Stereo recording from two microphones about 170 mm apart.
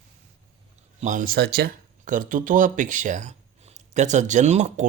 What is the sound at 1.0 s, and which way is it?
Speech, 50° right (ahead or behind).